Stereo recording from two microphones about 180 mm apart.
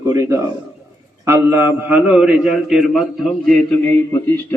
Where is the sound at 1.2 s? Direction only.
10° right (ahead or behind).